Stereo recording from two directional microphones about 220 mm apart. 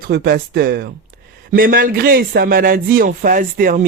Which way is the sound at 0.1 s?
45° right (ahead or behind).